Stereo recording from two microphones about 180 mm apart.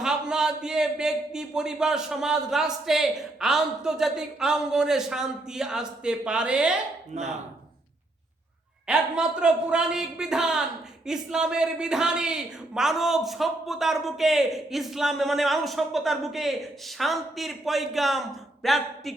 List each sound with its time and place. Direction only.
0.0 s a man's voice: 5° right (ahead or behind)
7.1 s speech: 40° right (ahead or behind)
8.9 s a man's voice: 5° right (ahead or behind)